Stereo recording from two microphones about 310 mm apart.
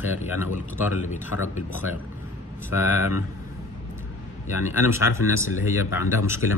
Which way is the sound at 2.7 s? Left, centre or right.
Centre.